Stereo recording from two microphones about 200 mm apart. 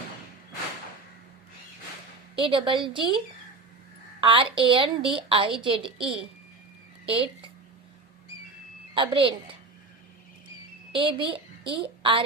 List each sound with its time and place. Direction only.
2.3 s a woman's voice: 25° right (ahead or behind)
4.2 s a woman's voice: 25° right (ahead or behind)
9.0 s a woman's voice: 25° right (ahead or behind)
10.9 s a child's voice: 25° right (ahead or behind)